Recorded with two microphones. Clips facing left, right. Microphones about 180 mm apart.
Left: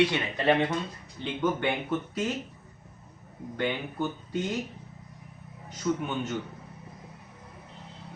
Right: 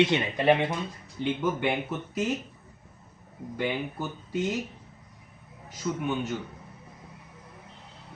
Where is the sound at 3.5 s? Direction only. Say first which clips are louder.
Even; 5° right (ahead or behind).